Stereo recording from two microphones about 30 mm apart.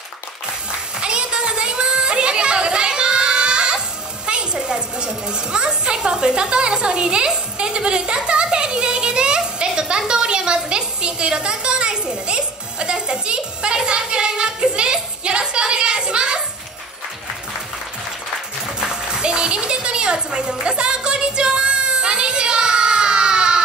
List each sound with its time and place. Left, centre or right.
1.0 s a sound: right
4.3 s a woman's voice: right
18.8 s music: right